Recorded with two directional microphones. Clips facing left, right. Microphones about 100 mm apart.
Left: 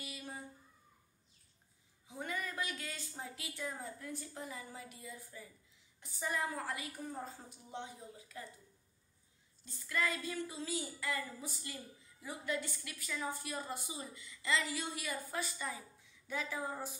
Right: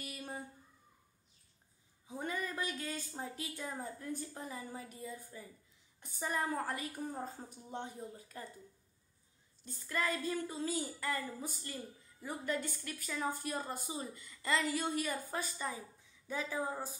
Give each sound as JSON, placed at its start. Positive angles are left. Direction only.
{"t": 0.0, "sound": "a sound", "side_deg": -45}
{"t": 2.0, "sound": "a woman's voice", "side_deg": -35}
{"t": 9.7, "sound": "a woman's voice", "side_deg": -40}
{"t": 16.4, "sound": "a woman's voice", "side_deg": -15}